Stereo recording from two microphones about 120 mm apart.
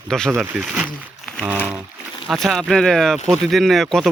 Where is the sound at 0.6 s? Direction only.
10° right (ahead or behind).